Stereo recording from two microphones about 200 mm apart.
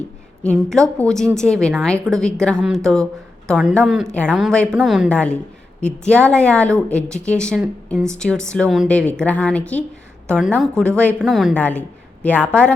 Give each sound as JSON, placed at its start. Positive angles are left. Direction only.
{"t": 0.4, "sound": "a woman's voice", "side_deg": 0}